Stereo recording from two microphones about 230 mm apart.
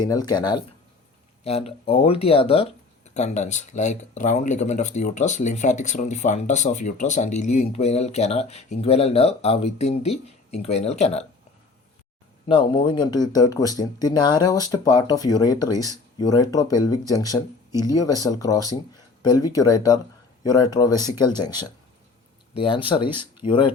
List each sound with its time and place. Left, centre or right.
0.0 s speech: centre
12.5 s speech: left